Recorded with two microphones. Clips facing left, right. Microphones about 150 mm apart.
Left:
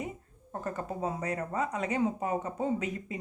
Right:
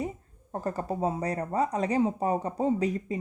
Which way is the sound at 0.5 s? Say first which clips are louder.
Right 4 dB; 35° right (ahead or behind).